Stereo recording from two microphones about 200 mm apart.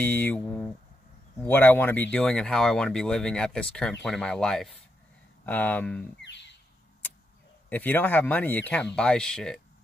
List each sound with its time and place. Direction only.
0.0 s speech: 10° left (ahead or behind)
6.2 s a sound: 60° left (ahead or behind)
7.7 s speech: 10° left (ahead or behind)